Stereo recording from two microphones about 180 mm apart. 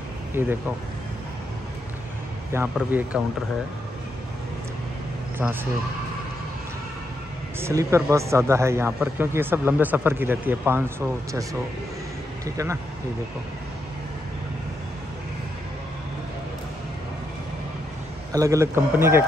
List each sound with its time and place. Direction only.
0.3 s speech: 10° right (ahead or behind)
2.5 s speech: 10° right (ahead or behind)
5.4 s speech: 10° right (ahead or behind)
7.6 s speech: 15° right (ahead or behind)
18.3 s speech: 15° right (ahead or behind)